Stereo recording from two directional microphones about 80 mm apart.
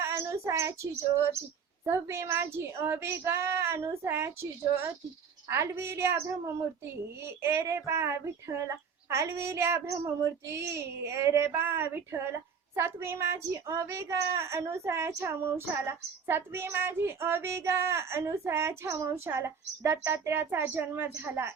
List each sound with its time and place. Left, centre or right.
0.0 s a child's voice: right